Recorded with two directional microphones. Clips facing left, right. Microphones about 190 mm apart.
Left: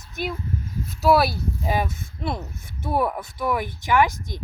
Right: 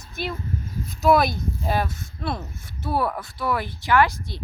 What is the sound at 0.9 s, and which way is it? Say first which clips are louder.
A woman's voice: even; 5° left (ahead or behind).